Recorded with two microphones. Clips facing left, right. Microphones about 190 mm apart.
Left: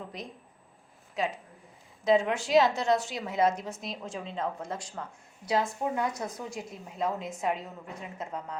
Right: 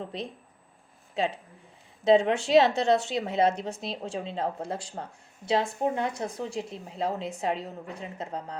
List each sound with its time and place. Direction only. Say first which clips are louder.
0.0 s a woman's voice: right 5 dB; 30° right (ahead or behind)